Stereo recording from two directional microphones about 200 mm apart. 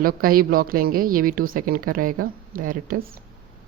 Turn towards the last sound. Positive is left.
turn(degrees=-45)  # may be behind; listen again after turning